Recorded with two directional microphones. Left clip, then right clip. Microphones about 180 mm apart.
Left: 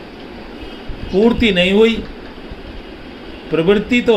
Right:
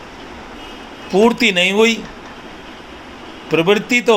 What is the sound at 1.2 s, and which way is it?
Speech, 15° right (ahead or behind).